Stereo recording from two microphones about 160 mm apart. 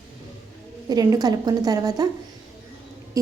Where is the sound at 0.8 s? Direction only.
25° right (ahead or behind).